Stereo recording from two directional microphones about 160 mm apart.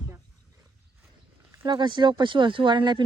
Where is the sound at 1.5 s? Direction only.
30° right (ahead or behind).